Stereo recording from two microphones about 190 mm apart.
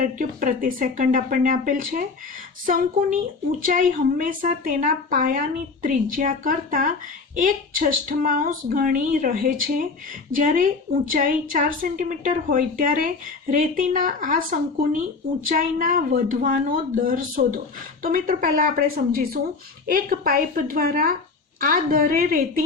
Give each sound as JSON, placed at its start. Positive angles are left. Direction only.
{"t": 0.0, "sound": "a woman's voice", "side_deg": -45}